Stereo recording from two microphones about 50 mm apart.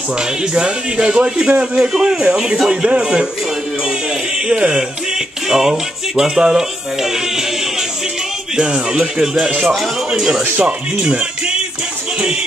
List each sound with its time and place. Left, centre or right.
0.2 s a man's voice: centre
4.5 s music: centre
8.5 s a man's voice: centre
9.7 s speech: centre
10.6 s speech: right